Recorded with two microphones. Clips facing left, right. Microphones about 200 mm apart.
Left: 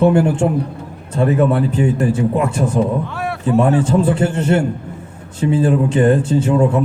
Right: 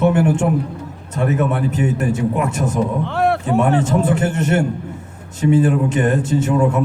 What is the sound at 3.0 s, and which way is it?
Speech, 65° right (ahead or behind).